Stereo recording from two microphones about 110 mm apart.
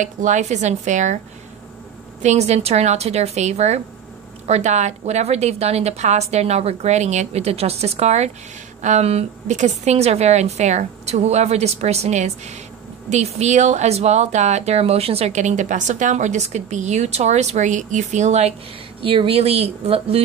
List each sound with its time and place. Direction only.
0.0 s speech: 90° right
2.2 s a woman's voice: 90° right
18.9 s speech: 55° right (ahead or behind)